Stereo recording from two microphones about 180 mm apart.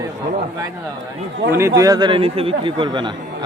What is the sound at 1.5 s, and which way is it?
A man's voice, 15° right (ahead or behind).